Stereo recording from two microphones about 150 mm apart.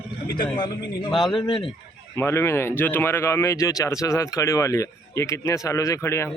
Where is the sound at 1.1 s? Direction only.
Centre (ahead or behind).